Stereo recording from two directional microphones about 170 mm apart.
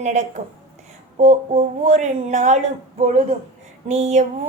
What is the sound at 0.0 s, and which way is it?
A woman's voice, 45° right (ahead or behind).